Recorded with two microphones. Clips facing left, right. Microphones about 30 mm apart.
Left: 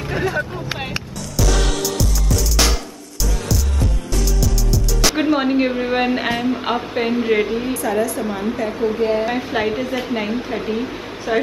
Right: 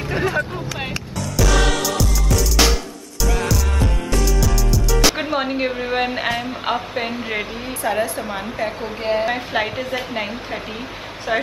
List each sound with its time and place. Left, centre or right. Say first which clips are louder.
0.1 s vehicle: even; centre
1.3 s music: right 2 dB; centre
4.1 s music: right 3 dB; centre
7.8 s a woman's voice: right 3 dB; right; by 11.4 s centre